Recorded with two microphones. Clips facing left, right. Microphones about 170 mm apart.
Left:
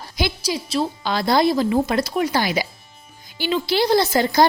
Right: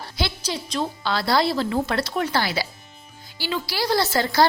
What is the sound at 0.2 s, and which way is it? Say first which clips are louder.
Speech: left 4 dB; 10° left (ahead or behind).